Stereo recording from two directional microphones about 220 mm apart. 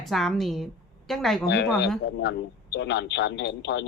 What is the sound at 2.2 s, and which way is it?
A man's voice, 55° left (ahead or behind).